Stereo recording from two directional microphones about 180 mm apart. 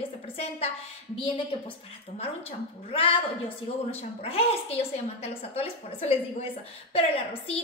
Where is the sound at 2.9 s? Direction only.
30° left (ahead or behind).